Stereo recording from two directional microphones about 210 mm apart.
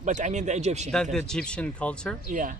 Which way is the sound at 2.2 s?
40° right (ahead or behind).